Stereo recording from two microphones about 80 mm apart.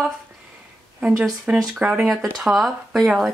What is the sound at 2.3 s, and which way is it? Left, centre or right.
Speech, centre.